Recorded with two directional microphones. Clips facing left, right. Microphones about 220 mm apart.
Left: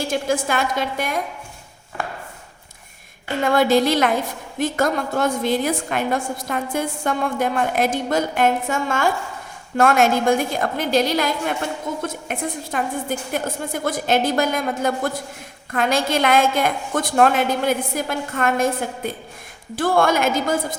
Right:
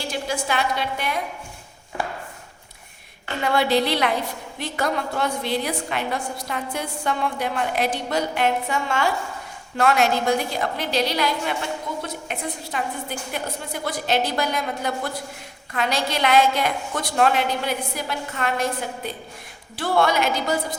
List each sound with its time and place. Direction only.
0.0 s a woman's voice: 50° left (ahead or behind)
3.4 s a woman's voice: 45° left (ahead or behind)